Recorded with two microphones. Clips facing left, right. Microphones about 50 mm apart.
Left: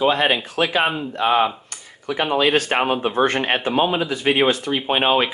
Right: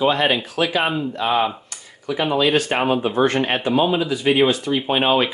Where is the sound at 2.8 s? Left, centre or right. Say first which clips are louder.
Right 1 dB; left.